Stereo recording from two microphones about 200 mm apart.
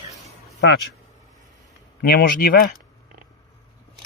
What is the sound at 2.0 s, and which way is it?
Speech, 50° left (ahead or behind).